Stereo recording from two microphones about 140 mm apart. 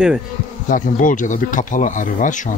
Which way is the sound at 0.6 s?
70° left (ahead or behind).